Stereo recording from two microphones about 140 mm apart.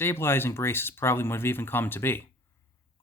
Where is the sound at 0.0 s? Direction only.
15° left (ahead or behind).